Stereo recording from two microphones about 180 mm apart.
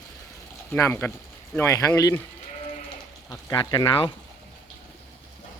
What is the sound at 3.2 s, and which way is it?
Speech, 25° left (ahead or behind).